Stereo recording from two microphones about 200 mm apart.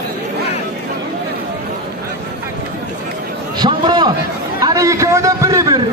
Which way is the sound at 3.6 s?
20° right (ahead or behind).